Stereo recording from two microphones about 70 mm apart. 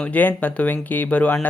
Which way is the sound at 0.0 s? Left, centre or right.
Left.